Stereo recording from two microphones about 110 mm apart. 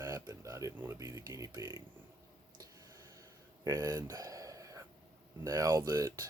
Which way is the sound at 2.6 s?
30° right (ahead or behind).